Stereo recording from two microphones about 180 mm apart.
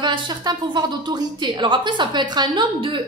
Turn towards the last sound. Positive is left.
turn(degrees=-25)  # may be behind; listen again after turning